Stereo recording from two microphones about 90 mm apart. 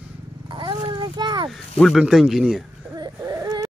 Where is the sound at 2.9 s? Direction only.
50° right (ahead or behind).